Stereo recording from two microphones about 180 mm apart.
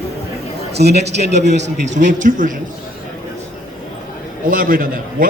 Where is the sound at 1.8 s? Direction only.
45° right (ahead or behind).